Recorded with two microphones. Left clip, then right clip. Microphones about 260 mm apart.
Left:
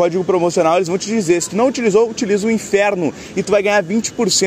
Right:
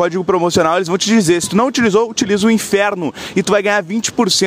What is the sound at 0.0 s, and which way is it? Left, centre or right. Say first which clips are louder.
Speech: even; right.